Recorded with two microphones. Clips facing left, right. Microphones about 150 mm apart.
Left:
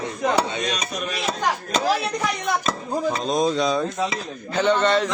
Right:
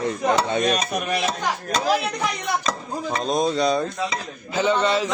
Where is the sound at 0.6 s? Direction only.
55° right (ahead or behind).